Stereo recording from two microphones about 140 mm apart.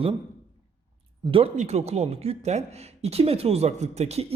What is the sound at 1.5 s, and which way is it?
A man's voice, 50° right (ahead or behind).